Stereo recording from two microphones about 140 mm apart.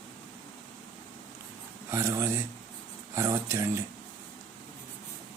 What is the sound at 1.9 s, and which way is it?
Speech, 20° right (ahead or behind).